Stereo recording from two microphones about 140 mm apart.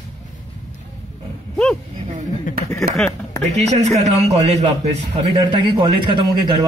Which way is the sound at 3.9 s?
50° right (ahead or behind).